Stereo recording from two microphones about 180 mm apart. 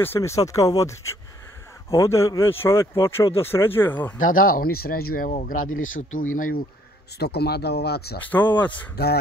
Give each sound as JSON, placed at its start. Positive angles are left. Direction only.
{"t": 0.0, "sound": "speech", "side_deg": 15}
{"t": 4.2, "sound": "speech", "side_deg": 50}
{"t": 7.2, "sound": "speech", "side_deg": 65}
{"t": 8.2, "sound": "speech", "side_deg": 10}
{"t": 8.9, "sound": "speech", "side_deg": 60}